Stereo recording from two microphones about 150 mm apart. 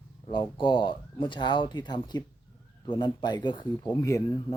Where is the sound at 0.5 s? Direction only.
35° left (ahead or behind).